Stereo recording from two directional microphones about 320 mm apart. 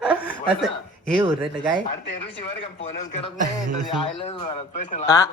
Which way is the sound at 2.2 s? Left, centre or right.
Centre.